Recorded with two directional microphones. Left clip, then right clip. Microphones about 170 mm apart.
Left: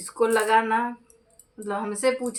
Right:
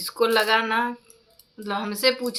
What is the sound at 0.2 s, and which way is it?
Speech, 15° left (ahead or behind).